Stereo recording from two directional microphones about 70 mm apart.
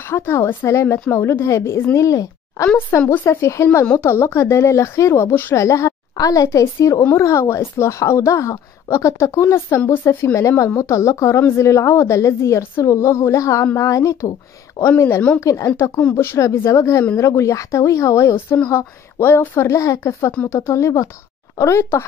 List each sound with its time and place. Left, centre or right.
0.1 s speech: left
3.1 s speech: left
5.3 s speech: left
5.6 s speech: left
9.8 s speech: left